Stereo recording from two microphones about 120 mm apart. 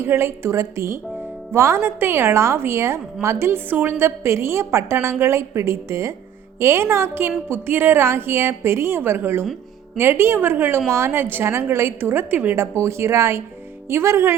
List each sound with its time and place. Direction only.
0.0 s a woman's voice: 20° right (ahead or behind)
9.4 s music: centre (ahead or behind)
10.0 s a woman's voice: 20° right (ahead or behind)